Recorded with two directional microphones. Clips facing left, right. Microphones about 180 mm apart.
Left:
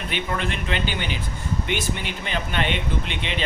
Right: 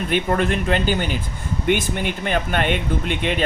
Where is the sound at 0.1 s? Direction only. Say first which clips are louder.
Right 7 dB; 45° right (ahead or behind).